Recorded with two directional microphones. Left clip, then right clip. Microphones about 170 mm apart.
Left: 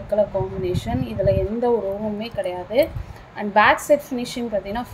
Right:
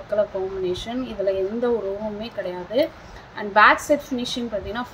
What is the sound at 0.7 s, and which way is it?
A woman's voice, 10° left (ahead or behind).